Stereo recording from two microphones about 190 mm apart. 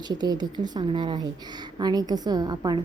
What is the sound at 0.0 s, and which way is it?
A woman's voice, 20° right (ahead or behind).